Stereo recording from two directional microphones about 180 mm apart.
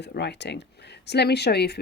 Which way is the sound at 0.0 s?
70° left (ahead or behind).